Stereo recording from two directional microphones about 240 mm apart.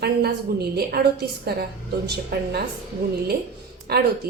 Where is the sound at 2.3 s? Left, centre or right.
Right.